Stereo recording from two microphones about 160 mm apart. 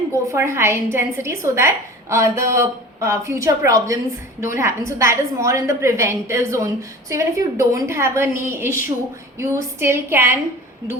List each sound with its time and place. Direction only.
0.1 s a woman's voice: 15° right (ahead or behind)